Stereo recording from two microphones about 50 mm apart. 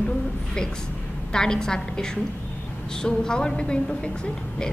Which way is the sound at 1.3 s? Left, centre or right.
Centre.